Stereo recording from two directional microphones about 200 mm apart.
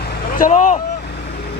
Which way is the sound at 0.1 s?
45° left (ahead or behind).